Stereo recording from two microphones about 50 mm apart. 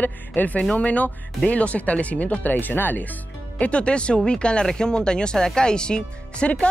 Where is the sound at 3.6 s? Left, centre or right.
Left.